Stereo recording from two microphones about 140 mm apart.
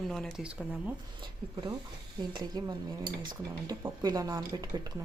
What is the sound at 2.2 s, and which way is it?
Speech, 30° right (ahead or behind).